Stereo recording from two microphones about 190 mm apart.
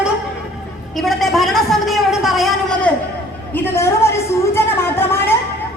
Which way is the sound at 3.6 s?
10° left (ahead or behind).